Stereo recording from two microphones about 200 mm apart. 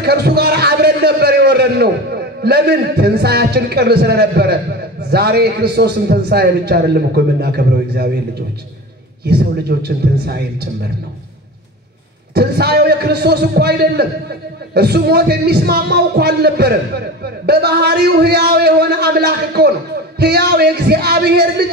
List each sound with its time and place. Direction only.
0.0 s a man's voice: 55° right (ahead or behind)
9.2 s a man's voice: 55° right (ahead or behind)
12.4 s a man's voice: 50° right (ahead or behind)